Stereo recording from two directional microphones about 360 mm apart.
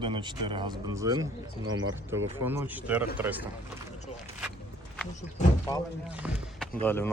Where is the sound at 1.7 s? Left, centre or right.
Right.